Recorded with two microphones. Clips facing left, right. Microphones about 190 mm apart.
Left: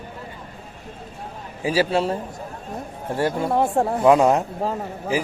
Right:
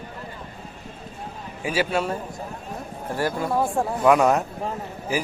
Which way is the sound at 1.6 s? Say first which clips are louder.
Left 4 dB; 30° left (ahead or behind).